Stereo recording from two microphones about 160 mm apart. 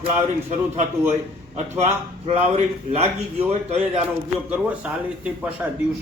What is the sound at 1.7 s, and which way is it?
A man's voice, 45° right (ahead or behind).